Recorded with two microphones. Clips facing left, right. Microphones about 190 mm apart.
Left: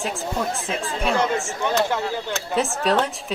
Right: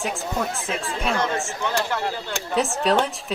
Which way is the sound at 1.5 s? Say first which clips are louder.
Left 3 dB; 20° left (ahead or behind).